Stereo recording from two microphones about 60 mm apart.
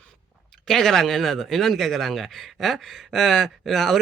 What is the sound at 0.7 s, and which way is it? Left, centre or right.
Speech, centre.